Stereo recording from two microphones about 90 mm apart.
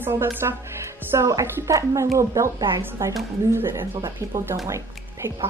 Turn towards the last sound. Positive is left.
turn(degrees=-35)  # may be behind; listen again after turning